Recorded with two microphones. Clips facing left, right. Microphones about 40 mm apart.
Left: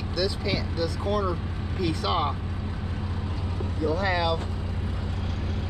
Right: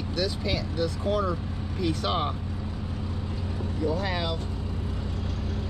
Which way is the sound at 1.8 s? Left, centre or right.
Left.